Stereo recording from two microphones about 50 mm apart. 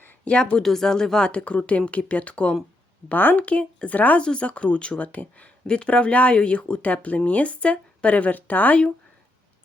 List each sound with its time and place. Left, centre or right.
0.3 s speech: left
0.6 s speech: centre
3.1 s speech: left
3.4 s speech: left
4.2 s speech: left
5.6 s speech: centre